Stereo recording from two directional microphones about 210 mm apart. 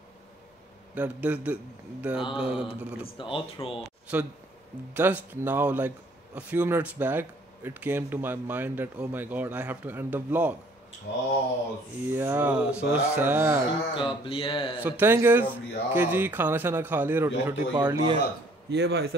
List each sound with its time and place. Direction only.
0.9 s speech: 5° right (ahead or behind)
2.3 s mantra: 5° right (ahead or behind)
3.2 s speech: 25° left (ahead or behind)
3.8 s speech: 5° right (ahead or behind)
11.1 s mantra: 50° left (ahead or behind)
12.1 s speech: 10° right (ahead or behind)
13.9 s speech: 25° left (ahead or behind)
14.8 s speech: 10° right (ahead or behind)
18.7 s a man's voice: 50° right (ahead or behind)